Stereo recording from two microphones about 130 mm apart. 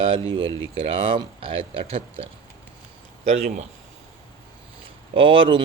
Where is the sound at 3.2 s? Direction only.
60° right (ahead or behind).